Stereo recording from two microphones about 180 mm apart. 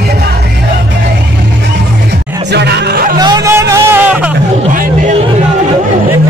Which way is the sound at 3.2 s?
20° right (ahead or behind).